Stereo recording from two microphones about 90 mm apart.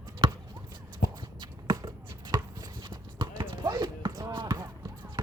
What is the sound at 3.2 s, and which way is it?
Basketball bounce, 55° right (ahead or behind).